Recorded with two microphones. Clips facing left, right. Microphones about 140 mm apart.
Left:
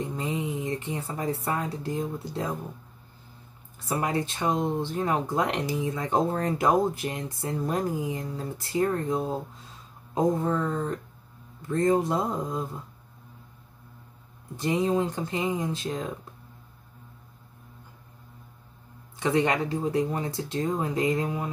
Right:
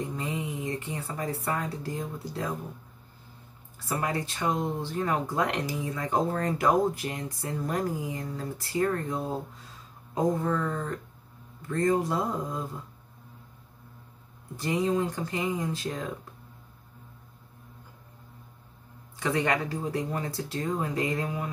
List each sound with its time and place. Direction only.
0.1 s speech: 20° left (ahead or behind)
3.9 s speech: 20° left (ahead or behind)
14.6 s speech: 20° left (ahead or behind)
19.1 s speech: 20° left (ahead or behind)